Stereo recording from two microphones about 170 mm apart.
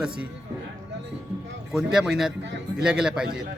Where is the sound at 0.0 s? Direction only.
5° right (ahead or behind).